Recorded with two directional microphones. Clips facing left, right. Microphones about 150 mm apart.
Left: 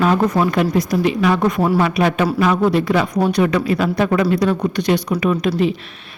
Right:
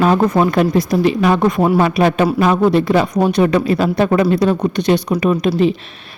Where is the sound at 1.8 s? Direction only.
35° right (ahead or behind).